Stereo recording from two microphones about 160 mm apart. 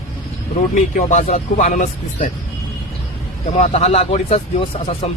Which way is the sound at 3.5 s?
45° left (ahead or behind).